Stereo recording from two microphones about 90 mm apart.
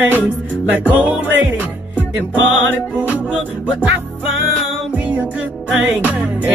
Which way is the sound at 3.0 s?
15° right (ahead or behind).